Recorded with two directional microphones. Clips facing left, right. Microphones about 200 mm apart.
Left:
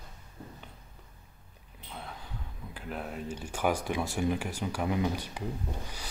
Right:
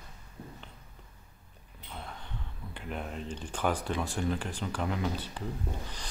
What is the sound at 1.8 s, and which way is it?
A man's voice, centre (ahead or behind).